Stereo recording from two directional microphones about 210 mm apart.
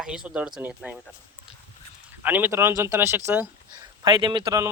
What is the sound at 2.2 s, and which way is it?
Speech, 10° right (ahead or behind).